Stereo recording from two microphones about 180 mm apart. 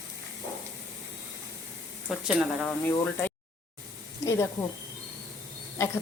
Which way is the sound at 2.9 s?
10° left (ahead or behind).